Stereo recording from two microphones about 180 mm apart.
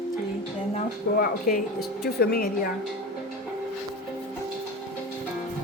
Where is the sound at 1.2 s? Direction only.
50° left (ahead or behind).